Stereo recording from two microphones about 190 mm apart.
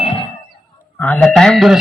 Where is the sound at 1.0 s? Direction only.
10° left (ahead or behind).